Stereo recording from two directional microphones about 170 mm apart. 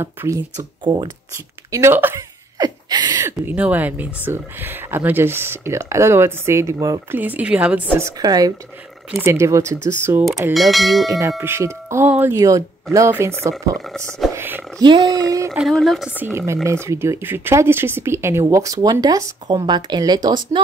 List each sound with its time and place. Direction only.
0.0 s speech: 15° right (ahead or behind)
2.6 s a sound: 25° right (ahead or behind)
3.3 s speech: 10° right (ahead or behind)
8.2 s speech: 25° right (ahead or behind)
10.5 s speech: centre (ahead or behind)
11.1 s speech: 20° right (ahead or behind)
13.7 s speech: centre (ahead or behind)
14.3 s roaring cats: 10° right (ahead or behind)
14.8 s speech: 25° right (ahead or behind)
15.5 s speech: centre (ahead or behind); by 20.6 s 25° right (ahead or behind)